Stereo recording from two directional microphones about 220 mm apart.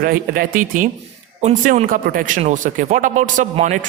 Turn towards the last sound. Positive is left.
turn(degrees=-35)  # may be behind; listen again after turning